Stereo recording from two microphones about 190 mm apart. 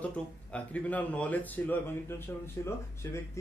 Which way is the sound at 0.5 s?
5° left (ahead or behind).